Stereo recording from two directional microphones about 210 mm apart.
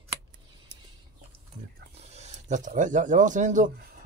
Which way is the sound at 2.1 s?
35° right (ahead or behind).